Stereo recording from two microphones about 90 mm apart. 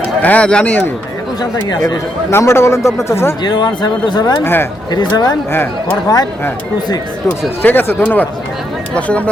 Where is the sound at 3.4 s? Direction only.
55° left (ahead or behind).